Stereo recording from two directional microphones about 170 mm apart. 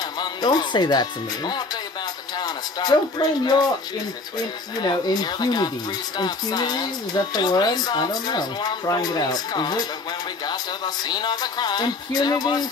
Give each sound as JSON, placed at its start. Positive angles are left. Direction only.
{"t": 0.2, "sound": "speech", "side_deg": 25}
{"t": 4.8, "sound": "speech", "side_deg": 25}
{"t": 11.1, "sound": "speech", "side_deg": 25}